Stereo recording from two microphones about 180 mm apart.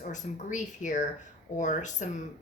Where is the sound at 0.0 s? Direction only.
45° left (ahead or behind).